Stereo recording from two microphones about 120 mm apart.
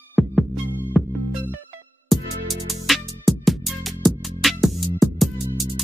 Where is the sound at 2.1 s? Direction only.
Centre (ahead or behind).